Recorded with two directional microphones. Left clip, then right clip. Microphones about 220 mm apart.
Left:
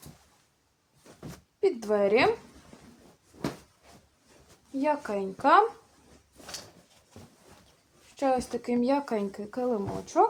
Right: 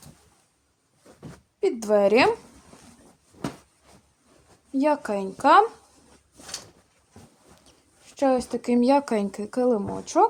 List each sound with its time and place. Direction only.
1.6 s speech: 50° right (ahead or behind)
3.3 s a sound: 40° right (ahead or behind)
4.8 s speech: 50° right (ahead or behind)
8.1 s speech: 45° right (ahead or behind)